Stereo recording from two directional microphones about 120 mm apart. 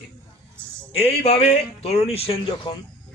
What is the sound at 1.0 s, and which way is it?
A man's voice, 55° left (ahead or behind).